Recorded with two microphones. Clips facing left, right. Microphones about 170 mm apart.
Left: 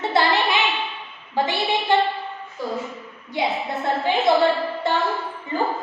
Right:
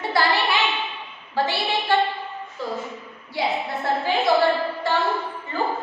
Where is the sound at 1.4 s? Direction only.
15° left (ahead or behind).